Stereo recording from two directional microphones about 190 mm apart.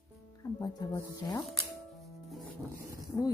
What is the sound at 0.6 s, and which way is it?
Speech, 20° left (ahead or behind).